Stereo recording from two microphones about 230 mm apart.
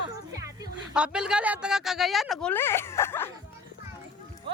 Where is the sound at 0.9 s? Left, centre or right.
Centre.